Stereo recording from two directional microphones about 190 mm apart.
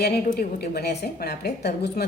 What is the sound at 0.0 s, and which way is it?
A woman's voice, 55° left (ahead or behind).